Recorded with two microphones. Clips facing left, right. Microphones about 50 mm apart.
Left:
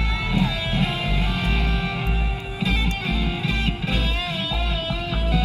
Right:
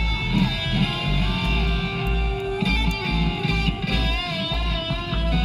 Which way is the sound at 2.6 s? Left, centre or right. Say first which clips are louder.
Even; left.